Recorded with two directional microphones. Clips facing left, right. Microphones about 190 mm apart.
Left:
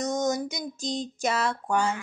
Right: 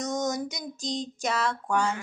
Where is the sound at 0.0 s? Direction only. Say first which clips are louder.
Left 2 dB; centre (ahead or behind).